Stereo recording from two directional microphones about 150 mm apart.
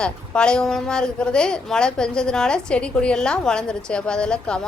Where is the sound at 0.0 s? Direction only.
5° left (ahead or behind).